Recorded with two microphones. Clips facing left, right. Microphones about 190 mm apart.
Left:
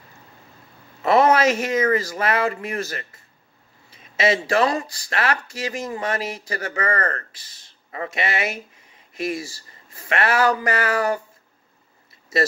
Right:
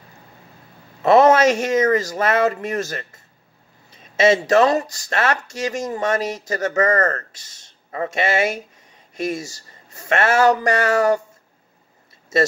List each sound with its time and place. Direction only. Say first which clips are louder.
1.2 s speech: right 3 dB; 45° right (ahead or behind)
4.2 s speech: right 5 dB; 45° right (ahead or behind)